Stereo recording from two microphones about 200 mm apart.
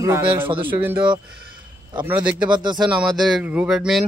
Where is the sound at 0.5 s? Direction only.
25° right (ahead or behind).